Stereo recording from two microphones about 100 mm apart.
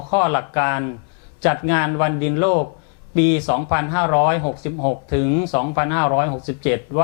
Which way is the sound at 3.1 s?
5° right (ahead or behind).